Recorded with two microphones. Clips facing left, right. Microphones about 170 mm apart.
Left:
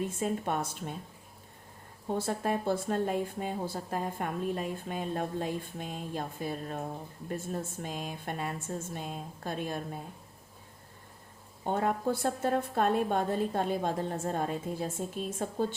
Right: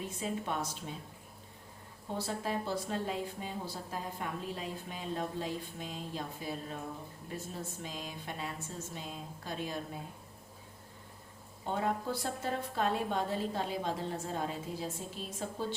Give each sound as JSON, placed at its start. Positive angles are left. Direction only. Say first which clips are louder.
{"t": 0.2, "sound": "a woman's voice", "louder": "left 2 dB", "side_deg": 50}
{"t": 2.1, "sound": "a woman's voice", "louder": "left 4 dB", "side_deg": 50}
{"t": 11.6, "sound": "a woman's voice", "louder": "left 4 dB", "side_deg": 50}